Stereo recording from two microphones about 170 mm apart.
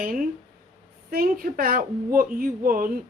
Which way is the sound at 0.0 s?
55° right (ahead or behind).